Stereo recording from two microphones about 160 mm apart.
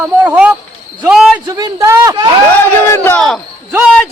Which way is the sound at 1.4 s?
20° right (ahead or behind).